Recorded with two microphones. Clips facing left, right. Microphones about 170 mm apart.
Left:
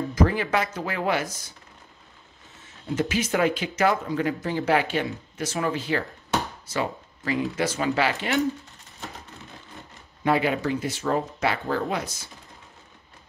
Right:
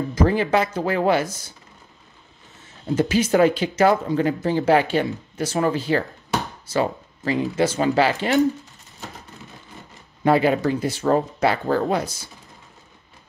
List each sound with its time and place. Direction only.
0.1 s speech: 30° right (ahead or behind)
3.0 s speech: 35° right (ahead or behind)
10.2 s speech: 35° right (ahead or behind)